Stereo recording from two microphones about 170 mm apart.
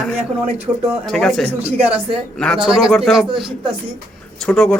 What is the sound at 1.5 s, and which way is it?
Speech, 35° right (ahead or behind).